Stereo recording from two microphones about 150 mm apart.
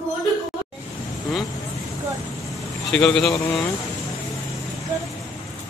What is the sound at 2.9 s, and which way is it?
Speech, 5° left (ahead or behind).